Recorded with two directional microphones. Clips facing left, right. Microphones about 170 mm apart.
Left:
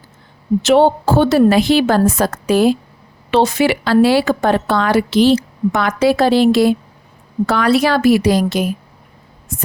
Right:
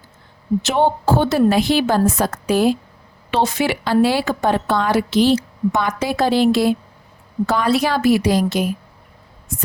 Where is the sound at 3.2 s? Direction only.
80° left.